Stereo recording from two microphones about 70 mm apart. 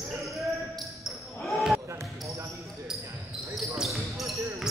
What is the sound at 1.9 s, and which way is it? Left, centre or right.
Basketball bounce, right.